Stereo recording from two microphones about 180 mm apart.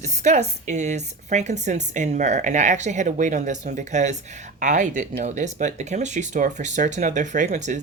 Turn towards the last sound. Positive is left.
turn(degrees=-40)  # may be behind; listen again after turning